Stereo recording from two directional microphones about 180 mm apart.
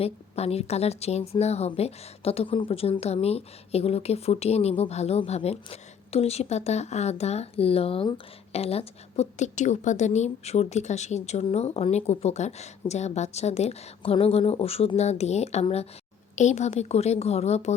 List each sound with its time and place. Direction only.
0.0 s a woman's voice: 35° left (ahead or behind)